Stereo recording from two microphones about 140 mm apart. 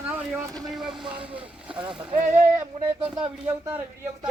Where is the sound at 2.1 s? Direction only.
60° right (ahead or behind).